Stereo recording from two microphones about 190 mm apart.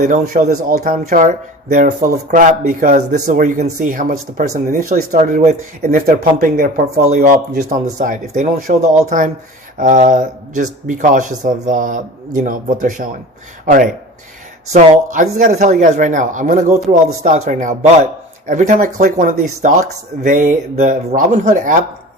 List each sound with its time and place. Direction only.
0.0 s a man's voice: 40° right (ahead or behind)